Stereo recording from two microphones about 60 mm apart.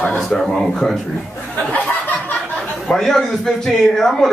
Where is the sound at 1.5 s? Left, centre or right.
Left.